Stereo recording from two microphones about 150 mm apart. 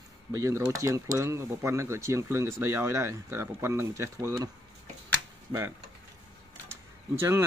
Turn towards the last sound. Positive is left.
turn(degrees=-15)  # may be behind; listen again after turning